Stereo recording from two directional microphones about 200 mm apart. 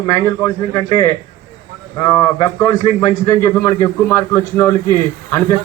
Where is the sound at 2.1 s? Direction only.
15° left (ahead or behind).